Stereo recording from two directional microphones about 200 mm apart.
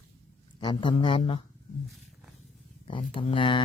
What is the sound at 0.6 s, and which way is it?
Speech, 25° left (ahead or behind).